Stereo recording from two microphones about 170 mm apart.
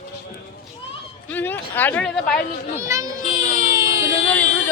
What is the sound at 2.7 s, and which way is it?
Child singing, 15° right (ahead or behind).